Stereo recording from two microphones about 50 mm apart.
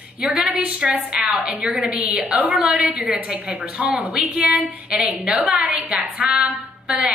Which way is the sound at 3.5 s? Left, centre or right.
Right.